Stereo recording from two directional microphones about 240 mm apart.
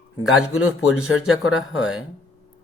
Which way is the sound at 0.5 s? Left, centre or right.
Left.